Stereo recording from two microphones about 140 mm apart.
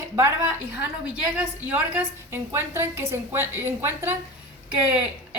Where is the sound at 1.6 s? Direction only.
15° right (ahead or behind).